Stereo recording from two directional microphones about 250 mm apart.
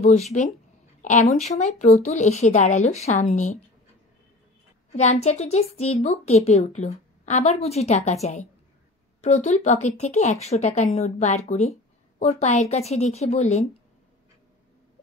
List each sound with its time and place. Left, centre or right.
0.0 s a woman's voice: left
4.9 s a woman's voice: left